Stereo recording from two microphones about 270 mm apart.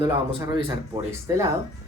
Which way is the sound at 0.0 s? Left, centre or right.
Centre.